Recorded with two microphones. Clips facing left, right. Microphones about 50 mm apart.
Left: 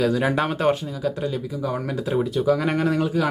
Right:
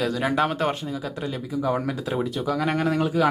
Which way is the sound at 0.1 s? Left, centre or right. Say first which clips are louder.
Left 1 dB; centre.